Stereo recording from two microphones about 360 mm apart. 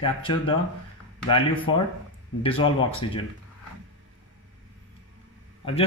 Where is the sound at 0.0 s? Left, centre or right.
Centre.